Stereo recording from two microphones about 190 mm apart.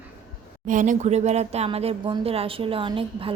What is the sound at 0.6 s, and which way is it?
A woman's voice, 45° right (ahead or behind).